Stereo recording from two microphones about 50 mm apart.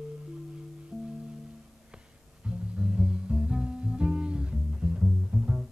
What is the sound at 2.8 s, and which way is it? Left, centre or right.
Music, centre.